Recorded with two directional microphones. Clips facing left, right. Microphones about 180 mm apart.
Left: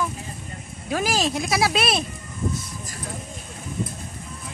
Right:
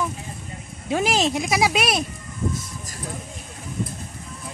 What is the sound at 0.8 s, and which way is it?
Speech, 20° right (ahead or behind).